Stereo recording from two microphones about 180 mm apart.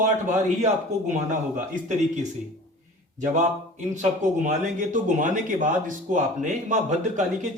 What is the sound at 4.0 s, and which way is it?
Speech, 45° right (ahead or behind).